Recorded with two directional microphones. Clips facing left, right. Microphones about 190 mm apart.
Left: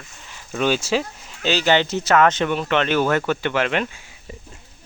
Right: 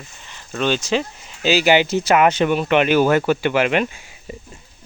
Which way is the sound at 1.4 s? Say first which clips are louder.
Right 3 dB; 10° right (ahead or behind).